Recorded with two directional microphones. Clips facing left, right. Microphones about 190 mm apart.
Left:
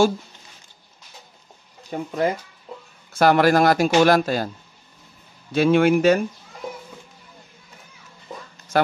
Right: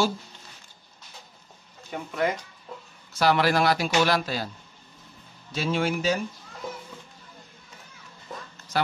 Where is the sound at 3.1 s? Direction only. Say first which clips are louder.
Left 6 dB; 50° left (ahead or behind).